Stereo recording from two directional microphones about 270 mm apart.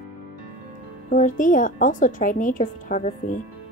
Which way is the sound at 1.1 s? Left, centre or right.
Left.